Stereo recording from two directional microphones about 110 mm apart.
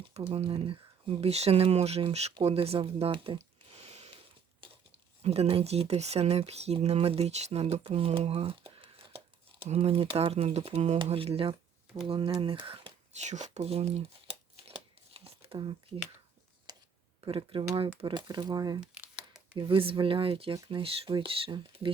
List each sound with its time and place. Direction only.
0.2 s speech: 65° right (ahead or behind)
5.2 s speech: 65° right (ahead or behind)
9.6 s speech: 70° right (ahead or behind)
10.9 s speech: 50° right (ahead or behind)
13.1 s speech: 90° right; by 14.0 s 70° right (ahead or behind)
15.1 s a sound: 60° right (ahead or behind)
16.7 s a sound: 35° right (ahead or behind)
17.2 s speech: 50° right (ahead or behind)
18.8 s crumpling: 10° right (ahead or behind)
19.5 s speech: 55° right (ahead or behind)